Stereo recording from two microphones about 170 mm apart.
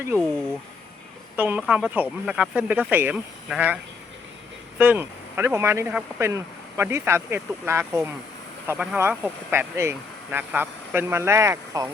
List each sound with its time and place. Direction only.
1.4 s speech: 10° right (ahead or behind)
4.8 s speech: 10° right (ahead or behind)